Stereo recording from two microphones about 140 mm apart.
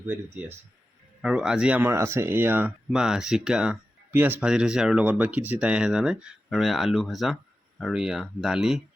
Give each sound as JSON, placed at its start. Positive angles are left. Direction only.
{"t": 0.0, "sound": "speech", "side_deg": -15}